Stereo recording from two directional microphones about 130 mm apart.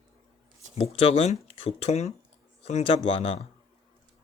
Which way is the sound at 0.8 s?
50° left (ahead or behind).